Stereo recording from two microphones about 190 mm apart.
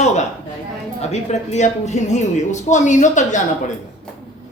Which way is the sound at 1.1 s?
35° left (ahead or behind).